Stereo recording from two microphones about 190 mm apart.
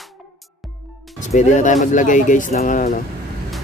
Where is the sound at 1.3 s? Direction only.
40° left (ahead or behind).